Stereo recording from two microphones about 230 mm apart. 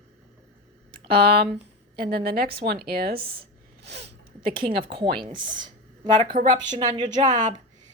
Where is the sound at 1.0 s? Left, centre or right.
Right.